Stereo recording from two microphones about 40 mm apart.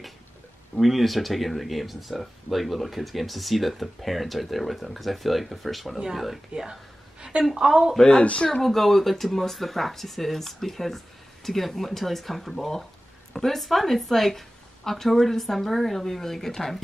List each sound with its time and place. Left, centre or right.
0.7 s speech: centre
6.5 s a sound: centre
7.4 s speech: centre
8.2 s speech: left
8.6 s speech: centre